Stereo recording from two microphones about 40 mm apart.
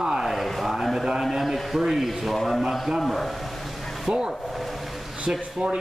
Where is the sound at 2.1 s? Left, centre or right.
Centre.